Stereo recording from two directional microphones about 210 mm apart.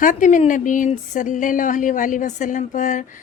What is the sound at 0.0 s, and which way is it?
Speech, 35° left (ahead or behind).